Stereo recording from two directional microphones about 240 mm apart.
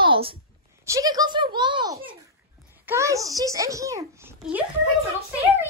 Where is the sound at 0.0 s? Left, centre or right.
Right.